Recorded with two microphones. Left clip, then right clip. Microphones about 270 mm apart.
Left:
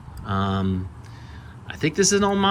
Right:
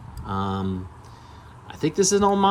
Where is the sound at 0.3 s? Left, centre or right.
Centre.